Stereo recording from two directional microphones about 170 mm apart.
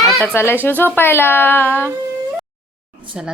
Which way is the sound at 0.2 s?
10° left (ahead or behind).